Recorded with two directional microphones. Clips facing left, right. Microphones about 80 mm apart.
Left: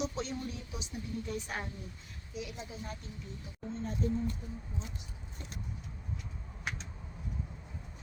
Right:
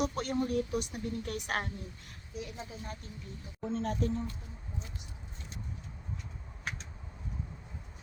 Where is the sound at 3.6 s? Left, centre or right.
Right.